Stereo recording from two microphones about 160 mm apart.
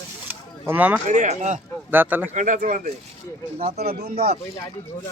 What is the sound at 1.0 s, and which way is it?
Speech, 50° right (ahead or behind).